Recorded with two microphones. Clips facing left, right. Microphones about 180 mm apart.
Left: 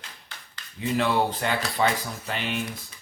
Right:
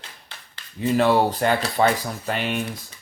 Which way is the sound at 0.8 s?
45° right (ahead or behind).